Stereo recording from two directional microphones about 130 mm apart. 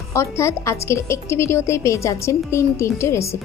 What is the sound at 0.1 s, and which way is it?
A woman's voice, 20° left (ahead or behind).